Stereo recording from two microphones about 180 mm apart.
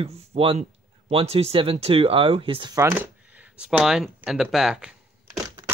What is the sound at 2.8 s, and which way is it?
Speech, 15° right (ahead or behind).